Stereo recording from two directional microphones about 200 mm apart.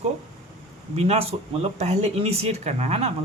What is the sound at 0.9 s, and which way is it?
Speech, 30° right (ahead or behind).